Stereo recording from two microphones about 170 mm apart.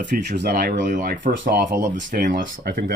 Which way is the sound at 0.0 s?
90° right.